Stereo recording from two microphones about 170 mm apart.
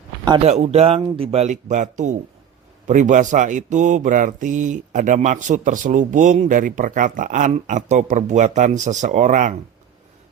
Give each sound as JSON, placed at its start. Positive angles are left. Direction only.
{"t": 0.4, "sound": "speech", "side_deg": -40}